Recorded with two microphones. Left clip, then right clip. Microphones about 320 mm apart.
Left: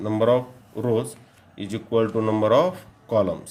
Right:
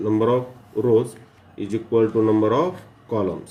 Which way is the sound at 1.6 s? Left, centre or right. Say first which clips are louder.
Right 3 dB; left.